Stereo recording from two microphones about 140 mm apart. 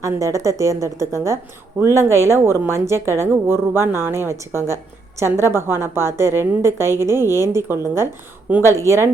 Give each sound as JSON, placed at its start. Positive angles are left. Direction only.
{"t": 0.0, "sound": "a woman's voice", "side_deg": -20}